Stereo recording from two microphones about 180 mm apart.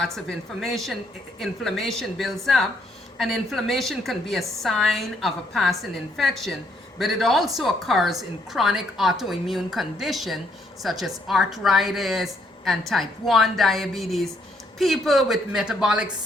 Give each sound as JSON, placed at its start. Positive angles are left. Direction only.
{"t": 0.0, "sound": "a woman's voice", "side_deg": 0}